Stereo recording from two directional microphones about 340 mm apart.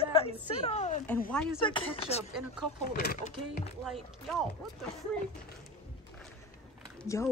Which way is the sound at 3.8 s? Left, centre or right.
Centre.